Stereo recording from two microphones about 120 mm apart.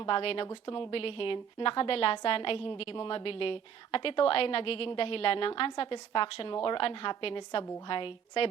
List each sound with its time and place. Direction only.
0.0 s a woman's voice: 50° left (ahead or behind)